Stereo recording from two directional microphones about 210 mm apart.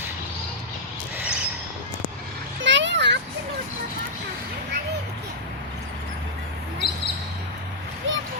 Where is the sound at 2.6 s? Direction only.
60° right (ahead or behind).